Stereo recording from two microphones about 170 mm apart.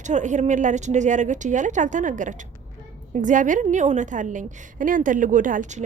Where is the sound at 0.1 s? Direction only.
45° right (ahead or behind).